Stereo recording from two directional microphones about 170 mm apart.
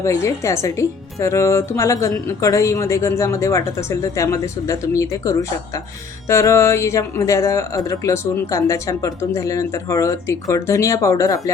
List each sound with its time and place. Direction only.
0.0 s speech: 15° left (ahead or behind)